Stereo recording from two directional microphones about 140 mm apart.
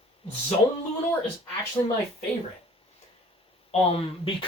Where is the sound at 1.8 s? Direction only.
35° left (ahead or behind).